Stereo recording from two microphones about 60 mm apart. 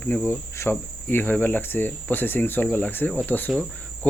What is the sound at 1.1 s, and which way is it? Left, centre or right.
Speech, left.